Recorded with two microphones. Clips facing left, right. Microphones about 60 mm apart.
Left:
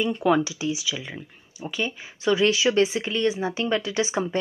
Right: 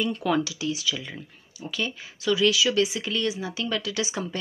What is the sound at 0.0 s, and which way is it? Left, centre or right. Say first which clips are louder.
Speech: left 3 dB; centre.